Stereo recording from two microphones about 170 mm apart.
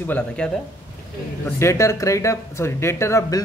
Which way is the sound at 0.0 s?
10° left (ahead or behind).